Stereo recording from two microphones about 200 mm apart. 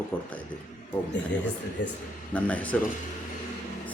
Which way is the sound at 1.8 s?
60° left (ahead or behind).